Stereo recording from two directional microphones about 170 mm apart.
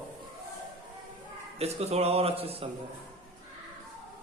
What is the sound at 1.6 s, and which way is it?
Speech, 35° right (ahead or behind).